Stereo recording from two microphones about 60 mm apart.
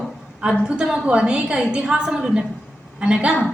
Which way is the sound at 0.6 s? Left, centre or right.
Centre.